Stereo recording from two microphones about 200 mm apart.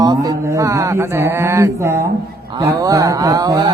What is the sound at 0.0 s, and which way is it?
A man's voice, 20° right (ahead or behind).